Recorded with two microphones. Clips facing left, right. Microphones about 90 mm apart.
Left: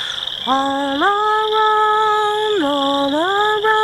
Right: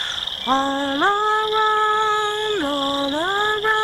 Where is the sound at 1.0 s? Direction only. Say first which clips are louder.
Left 3 dB; 10° left (ahead or behind).